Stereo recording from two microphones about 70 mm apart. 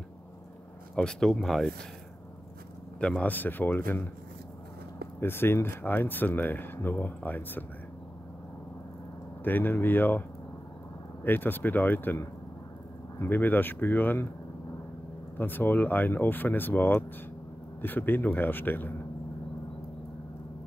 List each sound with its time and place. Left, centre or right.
0.9 s speech: centre
3.0 s speech: centre
5.2 s speech: left
9.4 s speech: left
11.2 s speech: left
15.3 s speech: left